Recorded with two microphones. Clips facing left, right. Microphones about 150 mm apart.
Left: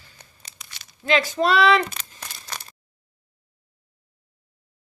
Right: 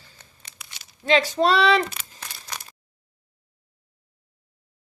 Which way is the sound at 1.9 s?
10° right (ahead or behind).